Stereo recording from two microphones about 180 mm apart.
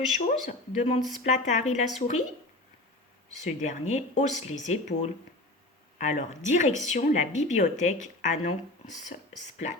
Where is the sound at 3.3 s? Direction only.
40° left (ahead or behind).